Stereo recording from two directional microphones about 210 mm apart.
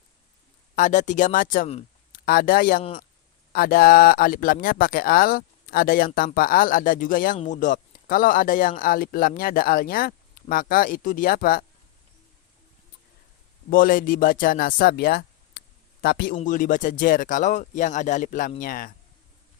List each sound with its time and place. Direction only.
0.8 s speech: 35° left (ahead or behind)
13.7 s speech: 40° left (ahead or behind)